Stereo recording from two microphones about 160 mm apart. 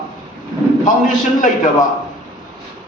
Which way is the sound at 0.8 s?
55° left (ahead or behind).